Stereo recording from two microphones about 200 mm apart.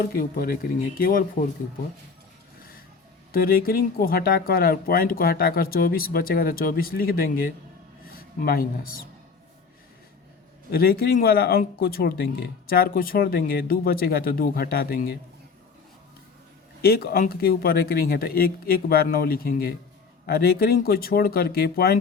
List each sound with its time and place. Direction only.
0.0 s speech: 45° left (ahead or behind)
3.3 s speech: 50° left (ahead or behind)
10.7 s speech: 50° left (ahead or behind)
16.8 s speech: 50° left (ahead or behind)